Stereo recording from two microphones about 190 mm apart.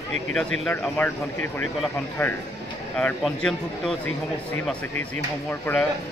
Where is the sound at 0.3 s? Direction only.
5° left (ahead or behind).